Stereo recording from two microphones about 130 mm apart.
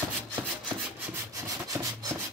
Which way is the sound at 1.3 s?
25° right (ahead or behind).